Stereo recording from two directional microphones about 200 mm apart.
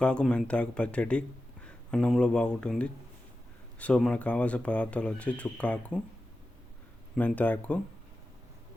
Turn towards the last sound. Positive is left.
turn(degrees=5)  # may be behind; listen again after turning